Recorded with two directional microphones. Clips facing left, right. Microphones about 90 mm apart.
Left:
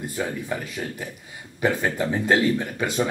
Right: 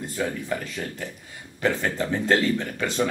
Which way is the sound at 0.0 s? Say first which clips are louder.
Even; 15° left (ahead or behind).